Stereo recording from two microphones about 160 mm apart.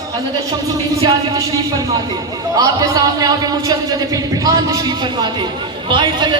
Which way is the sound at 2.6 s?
20° right (ahead or behind).